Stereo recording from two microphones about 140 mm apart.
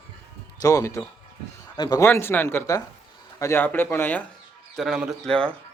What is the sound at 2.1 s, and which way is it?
A man's voice, 15° left (ahead or behind).